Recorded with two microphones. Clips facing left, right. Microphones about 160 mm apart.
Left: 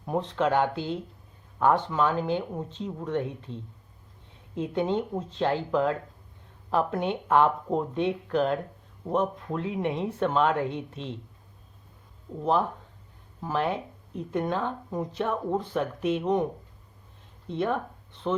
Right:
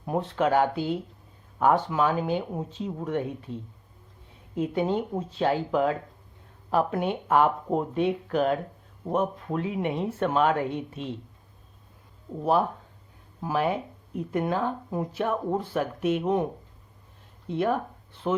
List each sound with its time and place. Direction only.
0.0 s speech: 5° right (ahead or behind)
12.4 s speech: 5° right (ahead or behind)
17.5 s speech: 5° right (ahead or behind)